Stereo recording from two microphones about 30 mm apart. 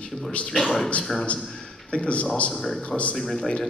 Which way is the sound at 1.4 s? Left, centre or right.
Centre.